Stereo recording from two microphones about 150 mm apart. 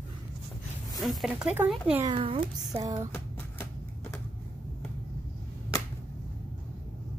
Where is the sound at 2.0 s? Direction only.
40° right (ahead or behind).